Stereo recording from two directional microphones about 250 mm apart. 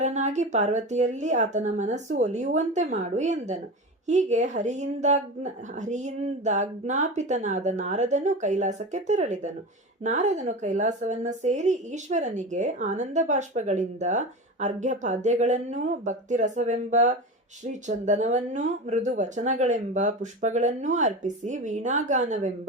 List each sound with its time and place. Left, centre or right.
0.0 s a woman's voice: right